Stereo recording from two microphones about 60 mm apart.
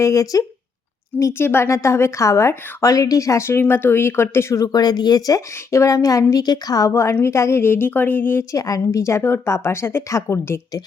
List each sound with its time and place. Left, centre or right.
0.0 s a woman's voice: left
1.3 s a woman's voice: left
3.6 s speech: left
4.5 s speech: left
5.7 s a woman's voice: left
6.9 s a woman's voice: left
8.5 s a woman's voice: left
10.1 s a woman's voice: left